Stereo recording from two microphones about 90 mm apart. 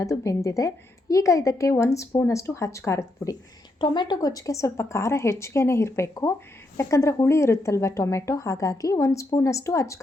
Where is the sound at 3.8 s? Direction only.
55° left (ahead or behind).